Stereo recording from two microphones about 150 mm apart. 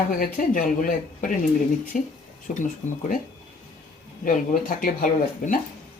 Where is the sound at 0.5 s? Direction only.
65° left (ahead or behind).